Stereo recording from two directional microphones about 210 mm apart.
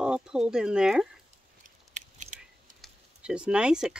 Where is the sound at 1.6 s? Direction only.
35° right (ahead or behind).